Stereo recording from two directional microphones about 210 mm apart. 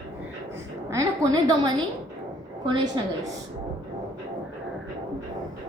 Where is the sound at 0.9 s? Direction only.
15° right (ahead or behind).